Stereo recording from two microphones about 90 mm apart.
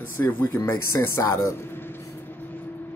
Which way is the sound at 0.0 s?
25° left (ahead or behind).